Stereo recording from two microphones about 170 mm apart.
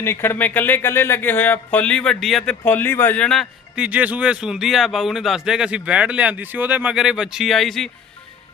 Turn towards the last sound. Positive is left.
turn(degrees=0)  # may be behind; listen again after turning